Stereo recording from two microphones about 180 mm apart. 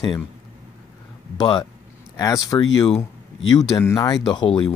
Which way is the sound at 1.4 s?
25° left (ahead or behind).